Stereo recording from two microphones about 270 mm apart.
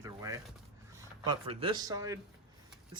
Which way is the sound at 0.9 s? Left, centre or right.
Centre.